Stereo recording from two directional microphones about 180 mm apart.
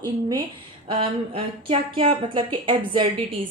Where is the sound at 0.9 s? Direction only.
30° right (ahead or behind).